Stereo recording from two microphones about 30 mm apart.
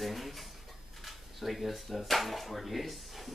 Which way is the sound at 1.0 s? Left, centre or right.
Centre.